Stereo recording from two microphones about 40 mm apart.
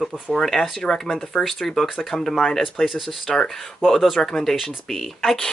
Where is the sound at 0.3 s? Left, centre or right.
Centre.